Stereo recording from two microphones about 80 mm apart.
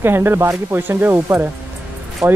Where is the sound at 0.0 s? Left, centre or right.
Right.